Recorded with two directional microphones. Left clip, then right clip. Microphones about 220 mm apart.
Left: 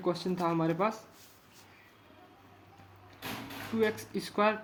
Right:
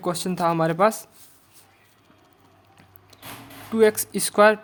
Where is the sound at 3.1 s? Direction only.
45° right (ahead or behind).